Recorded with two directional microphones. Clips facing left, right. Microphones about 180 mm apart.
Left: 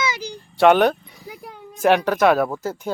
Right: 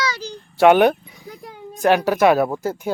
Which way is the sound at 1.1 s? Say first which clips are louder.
Even; centre (ahead or behind).